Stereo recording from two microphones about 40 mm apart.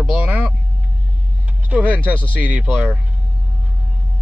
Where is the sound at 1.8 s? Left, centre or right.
Right.